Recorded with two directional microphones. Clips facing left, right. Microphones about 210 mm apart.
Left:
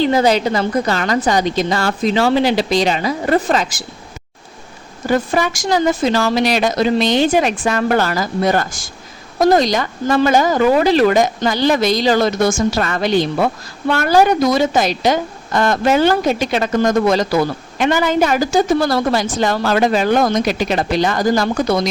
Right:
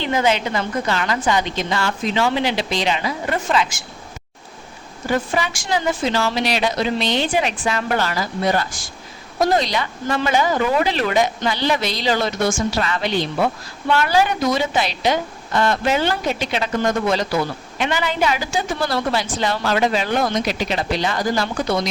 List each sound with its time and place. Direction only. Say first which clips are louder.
0.0 s a woman's voice: left 6 dB; 40° left (ahead or behind)
5.0 s a woman's voice: left 5 dB; 40° left (ahead or behind)